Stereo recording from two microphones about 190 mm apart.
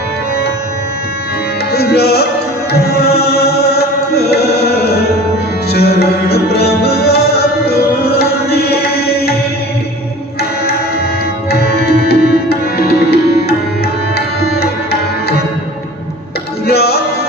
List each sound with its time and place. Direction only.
1.7 s music: 55° left (ahead or behind)
2.7 s chant: 55° left (ahead or behind)
5.7 s music: 55° left (ahead or behind)
11.6 s tabla: 55° left (ahead or behind)
12.0 s music: 55° left (ahead or behind)
16.6 s music: 55° left (ahead or behind)